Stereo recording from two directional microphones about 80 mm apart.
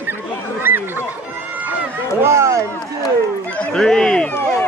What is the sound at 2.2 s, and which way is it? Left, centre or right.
Speech, right.